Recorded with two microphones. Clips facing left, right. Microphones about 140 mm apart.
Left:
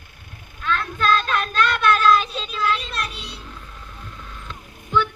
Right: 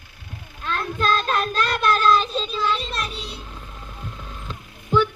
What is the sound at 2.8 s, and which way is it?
Child singing, 30° right (ahead or behind).